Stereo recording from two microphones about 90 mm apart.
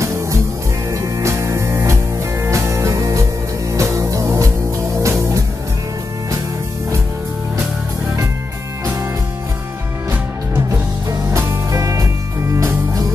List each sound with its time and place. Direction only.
1.0 s music: 35° right (ahead or behind)
11.3 s music: 35° right (ahead or behind)